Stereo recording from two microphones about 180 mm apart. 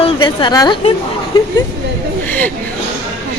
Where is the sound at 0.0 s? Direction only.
25° left (ahead or behind).